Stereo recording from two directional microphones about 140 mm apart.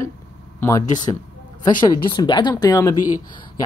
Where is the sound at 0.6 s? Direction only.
25° left (ahead or behind).